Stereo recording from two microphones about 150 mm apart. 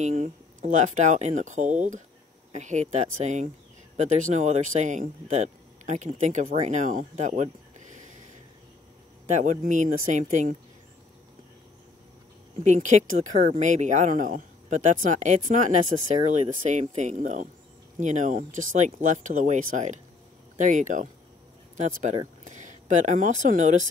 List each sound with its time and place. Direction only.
0.0 s speech: 55° right (ahead or behind)
9.2 s speech: 55° right (ahead or behind)
12.6 s speech: 55° right (ahead or behind)